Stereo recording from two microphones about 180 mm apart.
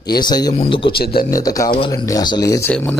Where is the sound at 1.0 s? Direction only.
55° left (ahead or behind).